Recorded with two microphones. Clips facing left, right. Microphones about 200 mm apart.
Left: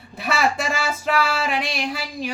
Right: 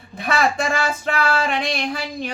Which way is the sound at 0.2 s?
5° left (ahead or behind).